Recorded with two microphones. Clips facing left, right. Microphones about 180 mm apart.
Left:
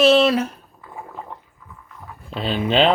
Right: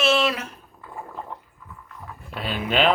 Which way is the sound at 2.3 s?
25° left (ahead or behind).